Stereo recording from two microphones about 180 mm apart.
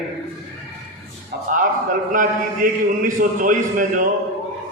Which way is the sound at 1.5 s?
45° right (ahead or behind).